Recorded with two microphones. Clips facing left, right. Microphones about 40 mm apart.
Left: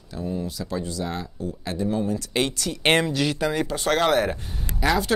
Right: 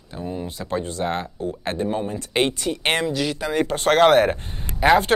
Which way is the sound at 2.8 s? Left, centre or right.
Centre.